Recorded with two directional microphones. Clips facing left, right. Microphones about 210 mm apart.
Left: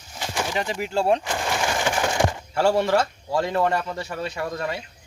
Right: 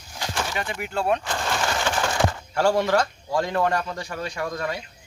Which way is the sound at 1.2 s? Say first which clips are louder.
Left 1 dB; 15° left (ahead or behind).